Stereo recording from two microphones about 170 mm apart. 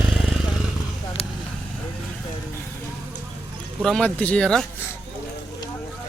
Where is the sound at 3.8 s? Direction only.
Centre (ahead or behind).